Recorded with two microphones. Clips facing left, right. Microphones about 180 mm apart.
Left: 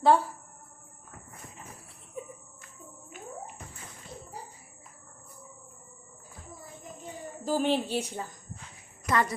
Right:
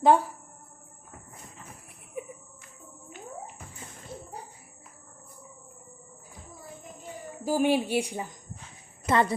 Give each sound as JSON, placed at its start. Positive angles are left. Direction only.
{"t": 0.0, "sound": "a woman's voice", "side_deg": -15}
{"t": 4.1, "sound": "a sound", "side_deg": -5}
{"t": 7.4, "sound": "a woman's voice", "side_deg": -10}
{"t": 9.0, "sound": "speech", "side_deg": -25}